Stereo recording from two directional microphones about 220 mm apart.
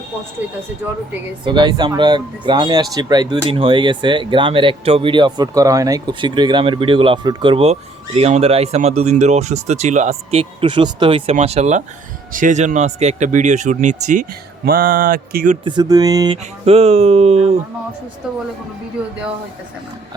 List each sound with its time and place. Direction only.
1.5 s speech: 20° right (ahead or behind); by 15.5 s 40° right (ahead or behind)
15.6 s speech: 20° right (ahead or behind)